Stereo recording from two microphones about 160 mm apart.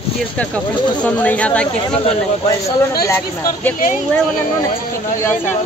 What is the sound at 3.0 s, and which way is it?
Speech, 15° left (ahead or behind).